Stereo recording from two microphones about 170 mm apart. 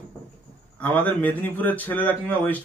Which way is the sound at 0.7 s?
10° left (ahead or behind).